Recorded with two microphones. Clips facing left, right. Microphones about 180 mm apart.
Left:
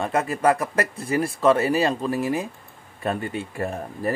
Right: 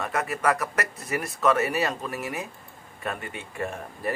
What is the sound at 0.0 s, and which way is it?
Speech, 30° left (ahead or behind).